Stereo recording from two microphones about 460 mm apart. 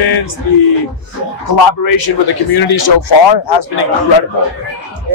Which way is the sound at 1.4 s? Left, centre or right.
Left.